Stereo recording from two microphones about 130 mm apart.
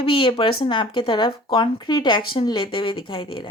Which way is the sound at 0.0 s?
45° left (ahead or behind).